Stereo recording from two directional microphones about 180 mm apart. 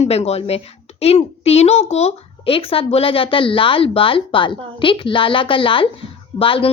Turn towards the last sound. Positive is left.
turn(degrees=30)  # may be behind; listen again after turning